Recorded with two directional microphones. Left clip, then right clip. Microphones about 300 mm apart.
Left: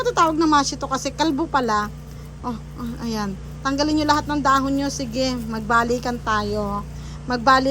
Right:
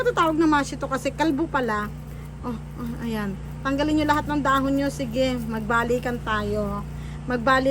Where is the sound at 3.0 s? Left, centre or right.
Centre.